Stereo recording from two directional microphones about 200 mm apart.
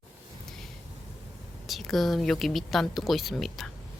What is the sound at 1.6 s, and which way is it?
A woman's voice, centre (ahead or behind).